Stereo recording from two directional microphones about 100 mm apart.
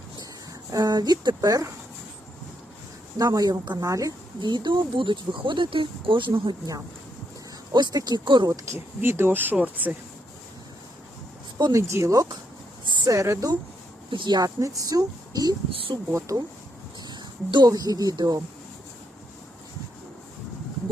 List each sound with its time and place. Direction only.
0.7 s speech: 40° right (ahead or behind)
3.2 s speech: 35° right (ahead or behind)
4.4 s speech: 50° right (ahead or behind)
7.7 s speech: 45° right (ahead or behind)
8.4 s speech: 30° right (ahead or behind)
11.5 s speech: 35° right (ahead or behind)
14.1 s speech: 50° right (ahead or behind)
15.7 s speech: 65° right (ahead or behind)
16.1 s speech: 35° right (ahead or behind)
17.1 s speech: 45° right (ahead or behind)